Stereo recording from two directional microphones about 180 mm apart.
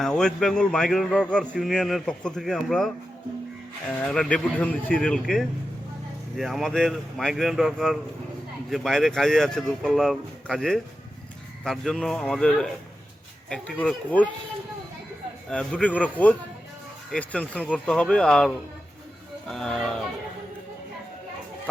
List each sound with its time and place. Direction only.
0.0 s a man's voice: 5° left (ahead or behind)
4.0 s a man's voice: 5° left (ahead or behind)
15.4 s a man's voice: 5° left (ahead or behind)